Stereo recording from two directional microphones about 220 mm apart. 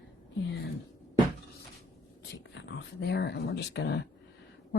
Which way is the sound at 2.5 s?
50° left (ahead or behind).